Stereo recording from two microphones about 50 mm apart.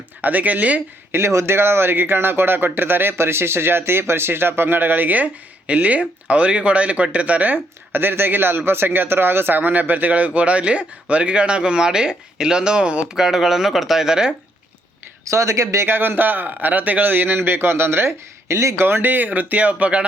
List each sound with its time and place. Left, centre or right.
0.2 s speech: right
1.1 s speech: right
13.1 s speech: centre
15.2 s speech: right
15.9 s speech: right
18.8 s speech: right